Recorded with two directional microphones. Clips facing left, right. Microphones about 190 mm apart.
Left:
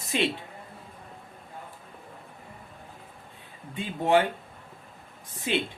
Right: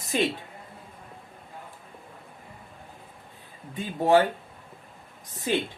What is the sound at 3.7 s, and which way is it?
Speech, 40° right (ahead or behind).